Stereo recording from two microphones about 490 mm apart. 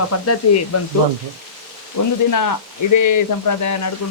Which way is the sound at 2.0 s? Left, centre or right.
Left.